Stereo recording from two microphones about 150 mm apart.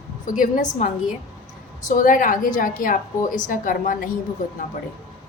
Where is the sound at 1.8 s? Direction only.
60° left (ahead or behind).